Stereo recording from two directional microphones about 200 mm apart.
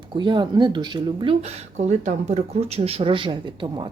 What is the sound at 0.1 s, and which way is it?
Speech, 25° right (ahead or behind).